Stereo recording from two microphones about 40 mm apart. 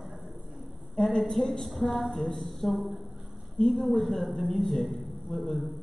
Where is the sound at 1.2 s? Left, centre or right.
Centre.